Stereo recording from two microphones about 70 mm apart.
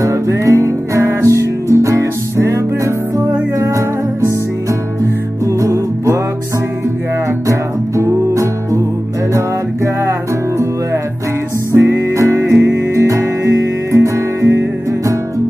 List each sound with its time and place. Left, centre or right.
0.0 s music: right
7.4 s music: right
11.8 s music: right
14.0 s music: right